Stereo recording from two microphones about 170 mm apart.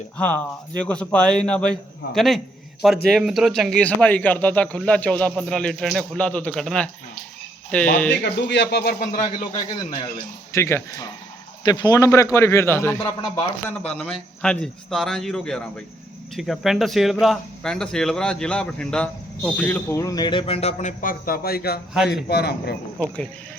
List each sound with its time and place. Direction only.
0.2 s a man's voice: 10° left (ahead or behind)
8.2 s speech: 90° left; by 9.0 s 65° left (ahead or behind)
9.1 s a man's voice: 40° left (ahead or behind)
10.5 s a man's voice: 15° left (ahead or behind); by 21.8 s 65° left (ahead or behind)
21.9 s speech: 5° right (ahead or behind)
22.3 s a man's voice: 70° left (ahead or behind)